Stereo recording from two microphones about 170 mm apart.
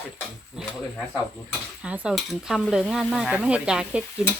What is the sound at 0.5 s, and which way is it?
Sizzle, centre (ahead or behind).